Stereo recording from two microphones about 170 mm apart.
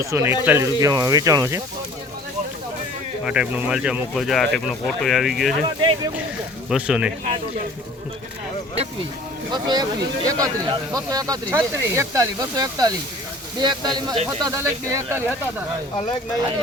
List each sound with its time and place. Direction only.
0.0 s speech: 15° right (ahead or behind)
3.2 s speech: 5° right (ahead or behind)
6.7 s speech: 5° right (ahead or behind)
9.5 s speech: 25° right (ahead or behind)